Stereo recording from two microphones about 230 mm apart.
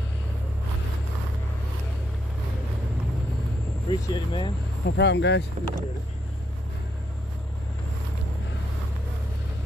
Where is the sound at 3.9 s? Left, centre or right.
Centre.